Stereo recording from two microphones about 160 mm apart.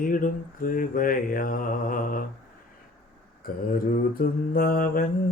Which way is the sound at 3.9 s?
65° left (ahead or behind).